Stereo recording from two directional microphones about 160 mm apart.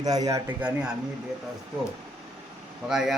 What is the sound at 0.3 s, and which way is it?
Speech, 20° right (ahead or behind).